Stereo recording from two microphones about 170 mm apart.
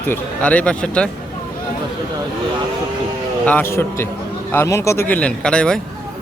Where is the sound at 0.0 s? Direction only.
10° left (ahead or behind).